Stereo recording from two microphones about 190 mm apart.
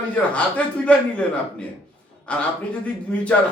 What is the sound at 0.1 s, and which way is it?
A man's voice, 5° left (ahead or behind).